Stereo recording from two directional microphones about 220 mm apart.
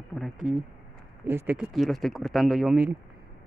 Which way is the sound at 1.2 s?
10° right (ahead or behind).